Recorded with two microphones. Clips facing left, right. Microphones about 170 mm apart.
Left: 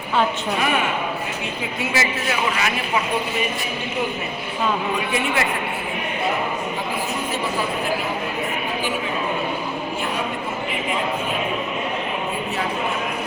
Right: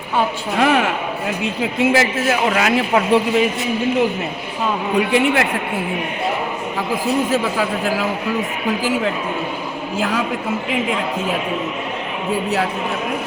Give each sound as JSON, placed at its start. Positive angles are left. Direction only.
{"t": 0.6, "sound": "a man's voice", "side_deg": -90}
{"t": 1.9, "sound": "a man's voice", "side_deg": -50}
{"t": 4.9, "sound": "a man's voice", "side_deg": -60}
{"t": 7.3, "sound": "a man's voice", "side_deg": -90}
{"t": 10.0, "sound": "a man's voice", "side_deg": -90}